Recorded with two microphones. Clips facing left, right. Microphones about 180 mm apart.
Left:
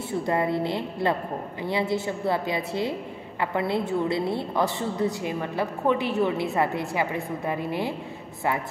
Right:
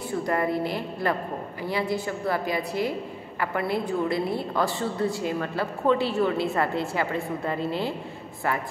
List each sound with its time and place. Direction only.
0.3 s a woman's voice: 20° left (ahead or behind)